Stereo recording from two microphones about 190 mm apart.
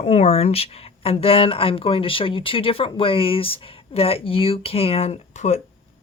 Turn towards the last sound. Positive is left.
turn(degrees=40)  # may be behind; listen again after turning